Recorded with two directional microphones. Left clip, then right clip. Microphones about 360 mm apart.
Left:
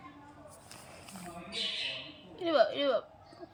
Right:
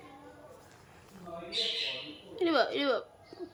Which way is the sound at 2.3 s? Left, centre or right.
Centre.